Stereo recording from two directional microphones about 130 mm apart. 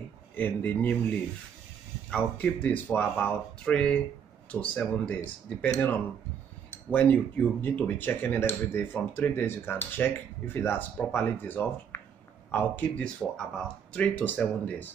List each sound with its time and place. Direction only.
0.4 s speech: 15° left (ahead or behind)
2.0 s speech: 10° left (ahead or behind)